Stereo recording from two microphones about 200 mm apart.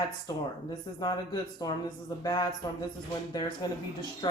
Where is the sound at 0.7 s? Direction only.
20° left (ahead or behind).